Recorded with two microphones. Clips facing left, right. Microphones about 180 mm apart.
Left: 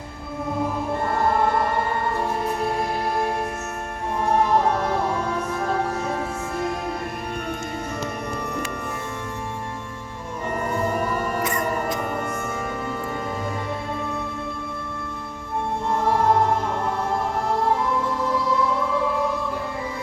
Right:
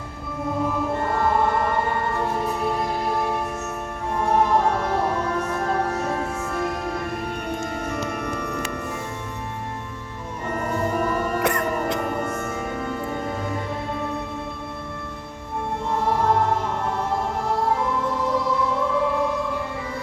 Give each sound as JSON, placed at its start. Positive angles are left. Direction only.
{"t": 11.4, "sound": "music", "side_deg": -65}